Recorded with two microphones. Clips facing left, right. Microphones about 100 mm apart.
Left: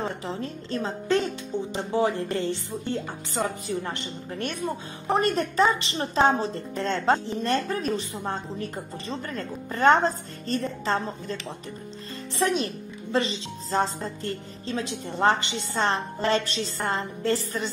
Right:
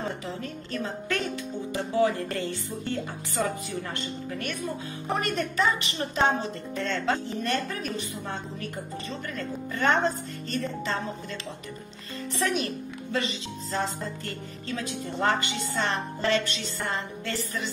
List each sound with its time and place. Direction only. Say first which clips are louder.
0.4 s a woman's voice: left 3 dB; 30° left (ahead or behind)